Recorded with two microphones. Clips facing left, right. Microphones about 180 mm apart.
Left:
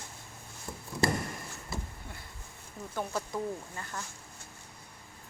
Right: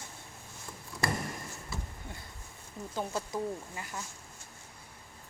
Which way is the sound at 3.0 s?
20° right (ahead or behind).